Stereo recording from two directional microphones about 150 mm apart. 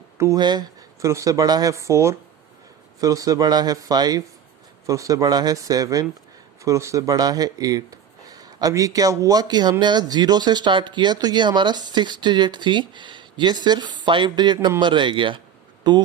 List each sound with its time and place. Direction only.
0.2 s speech: 25° right (ahead or behind)